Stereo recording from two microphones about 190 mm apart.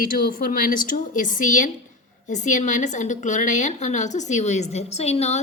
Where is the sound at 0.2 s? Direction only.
45° left (ahead or behind).